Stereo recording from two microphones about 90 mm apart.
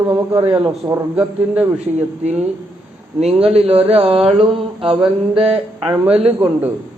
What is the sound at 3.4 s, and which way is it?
Speech, 90° right.